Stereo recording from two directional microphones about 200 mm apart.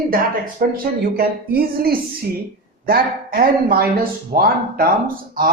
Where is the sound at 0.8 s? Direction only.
50° right (ahead or behind).